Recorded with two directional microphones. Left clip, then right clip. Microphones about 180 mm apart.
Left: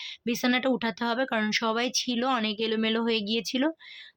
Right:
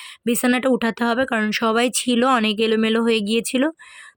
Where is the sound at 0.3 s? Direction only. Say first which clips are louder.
Right 7 dB; 35° right (ahead or behind).